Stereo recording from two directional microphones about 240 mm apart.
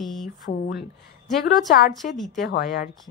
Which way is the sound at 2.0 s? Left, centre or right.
Centre.